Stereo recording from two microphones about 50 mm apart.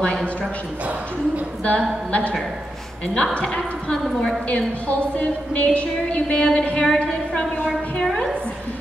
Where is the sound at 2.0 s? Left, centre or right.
Left.